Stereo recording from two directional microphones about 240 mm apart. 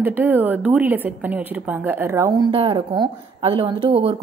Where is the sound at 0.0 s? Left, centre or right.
Centre.